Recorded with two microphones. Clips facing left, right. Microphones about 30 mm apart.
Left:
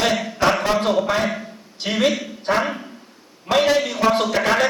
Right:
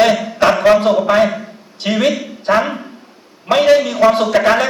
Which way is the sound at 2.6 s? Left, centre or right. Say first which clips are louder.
Right 5 dB; centre.